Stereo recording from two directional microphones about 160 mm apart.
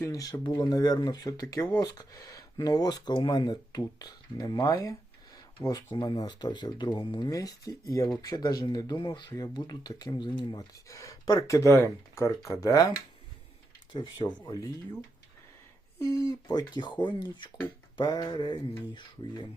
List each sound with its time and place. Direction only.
0.0 s speech: 20° left (ahead or behind)
13.9 s speech: 30° left (ahead or behind)
16.0 s speech: 20° left (ahead or behind)